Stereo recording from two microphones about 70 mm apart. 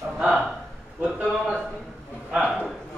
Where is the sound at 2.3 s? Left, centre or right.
Centre.